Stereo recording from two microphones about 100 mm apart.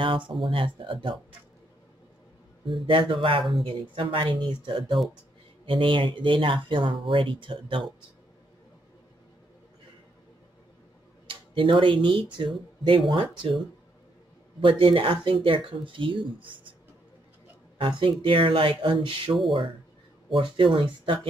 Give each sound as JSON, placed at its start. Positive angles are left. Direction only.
{"t": 0.0, "sound": "speech", "side_deg": -55}
{"t": 2.7, "sound": "speech", "side_deg": -60}
{"t": 11.2, "sound": "speech", "side_deg": -55}
{"t": 17.7, "sound": "speech", "side_deg": -60}
{"t": 20.3, "sound": "speech", "side_deg": -60}